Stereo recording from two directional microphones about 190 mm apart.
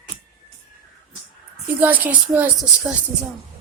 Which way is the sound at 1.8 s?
10° right (ahead or behind).